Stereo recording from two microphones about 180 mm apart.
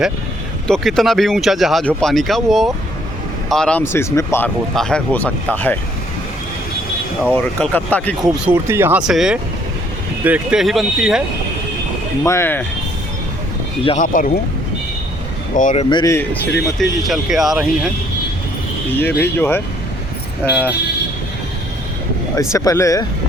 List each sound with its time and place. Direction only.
0.7 s speech: centre (ahead or behind)
7.3 s speech: 10° left (ahead or behind)
8.2 s speech: 20° right (ahead or behind); by 11.2 s centre (ahead or behind)
12.2 s speech: 15° left (ahead or behind)
14.0 s speech: 50° left (ahead or behind)
15.5 s speech: 40° left (ahead or behind)
16.1 s speech: 10° left (ahead or behind)
18.9 s speech: 10° left (ahead or behind)
22.4 s speech: 15° left (ahead or behind)